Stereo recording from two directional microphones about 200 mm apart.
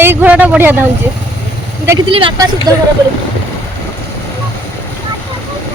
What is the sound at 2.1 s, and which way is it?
Speech, 25° right (ahead or behind).